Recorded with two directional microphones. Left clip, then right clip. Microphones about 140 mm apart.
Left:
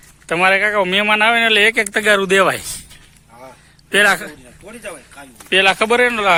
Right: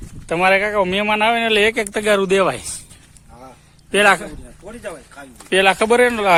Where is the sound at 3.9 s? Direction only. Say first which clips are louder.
Even; 5° right (ahead or behind).